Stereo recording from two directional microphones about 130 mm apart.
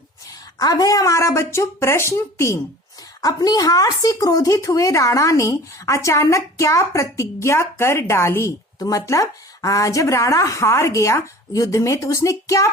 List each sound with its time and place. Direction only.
0.6 s speech: 30° left (ahead or behind)